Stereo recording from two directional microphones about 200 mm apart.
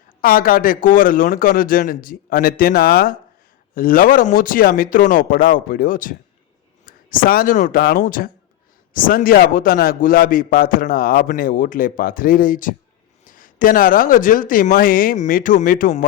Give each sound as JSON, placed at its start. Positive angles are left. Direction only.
{"t": 0.2, "sound": "a man's voice", "side_deg": 45}